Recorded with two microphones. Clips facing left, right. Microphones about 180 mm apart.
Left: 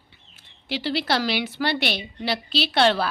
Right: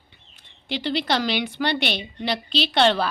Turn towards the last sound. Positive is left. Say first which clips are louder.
# right 1 dB
turn(degrees=5)  # may be behind; listen again after turning